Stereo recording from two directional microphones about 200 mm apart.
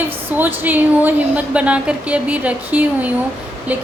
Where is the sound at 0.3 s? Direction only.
10° right (ahead or behind).